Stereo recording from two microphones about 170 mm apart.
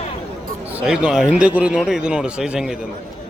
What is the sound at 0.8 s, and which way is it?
A man's voice, 5° right (ahead or behind).